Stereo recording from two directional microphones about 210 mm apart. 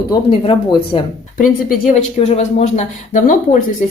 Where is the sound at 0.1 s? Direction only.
25° left (ahead or behind).